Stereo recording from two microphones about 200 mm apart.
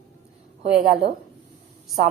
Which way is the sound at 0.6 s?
35° right (ahead or behind).